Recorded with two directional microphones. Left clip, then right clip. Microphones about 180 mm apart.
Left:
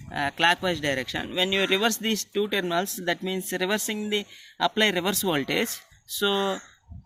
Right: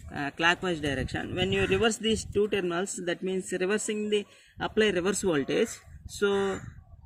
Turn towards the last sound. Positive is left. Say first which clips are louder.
# left 2 dB
turn(degrees=30)  # may be behind; listen again after turning